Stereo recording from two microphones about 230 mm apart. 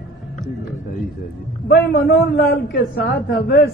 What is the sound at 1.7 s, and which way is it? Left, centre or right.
A man's voice, left.